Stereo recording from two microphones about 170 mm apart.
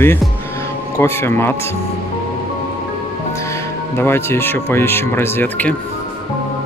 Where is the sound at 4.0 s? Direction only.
15° left (ahead or behind).